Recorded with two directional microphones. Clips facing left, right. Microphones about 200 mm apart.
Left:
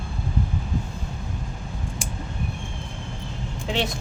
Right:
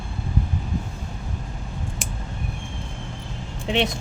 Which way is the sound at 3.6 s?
20° right (ahead or behind).